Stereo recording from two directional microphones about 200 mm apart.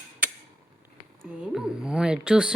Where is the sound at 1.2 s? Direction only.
5° right (ahead or behind).